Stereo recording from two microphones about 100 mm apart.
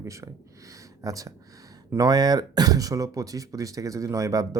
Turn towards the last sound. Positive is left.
turn(degrees=-35)  # may be behind; listen again after turning